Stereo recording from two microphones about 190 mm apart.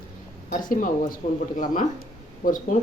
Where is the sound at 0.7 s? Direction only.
45° left (ahead or behind).